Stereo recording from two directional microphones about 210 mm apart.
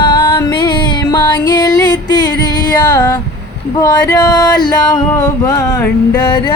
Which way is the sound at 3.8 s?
15° left (ahead or behind).